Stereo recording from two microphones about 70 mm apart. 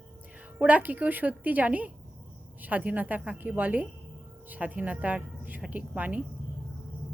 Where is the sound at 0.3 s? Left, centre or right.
Centre.